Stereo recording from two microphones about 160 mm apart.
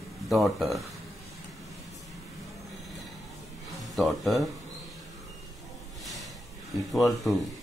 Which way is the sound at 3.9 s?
Centre (ahead or behind).